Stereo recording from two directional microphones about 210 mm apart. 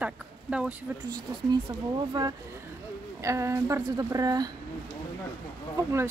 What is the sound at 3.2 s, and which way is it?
Speech, 15° right (ahead or behind).